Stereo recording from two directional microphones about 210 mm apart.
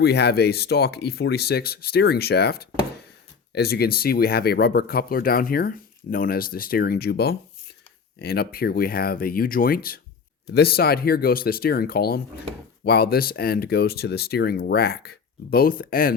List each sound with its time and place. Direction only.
0.0 s speech: 50° left (ahead or behind)